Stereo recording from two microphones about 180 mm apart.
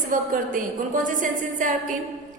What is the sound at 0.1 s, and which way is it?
Mantra, 45° right (ahead or behind).